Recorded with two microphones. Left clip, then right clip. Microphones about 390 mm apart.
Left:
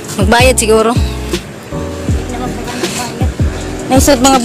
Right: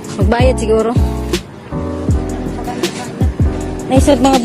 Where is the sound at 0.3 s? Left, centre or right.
Right.